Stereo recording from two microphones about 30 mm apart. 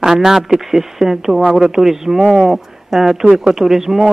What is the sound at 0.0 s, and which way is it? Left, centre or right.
Speech, centre.